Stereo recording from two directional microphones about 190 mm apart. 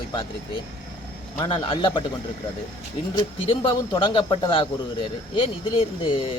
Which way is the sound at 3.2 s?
25° left (ahead or behind).